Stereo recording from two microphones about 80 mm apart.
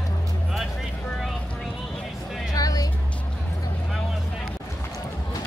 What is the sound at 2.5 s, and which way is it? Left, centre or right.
Music, left.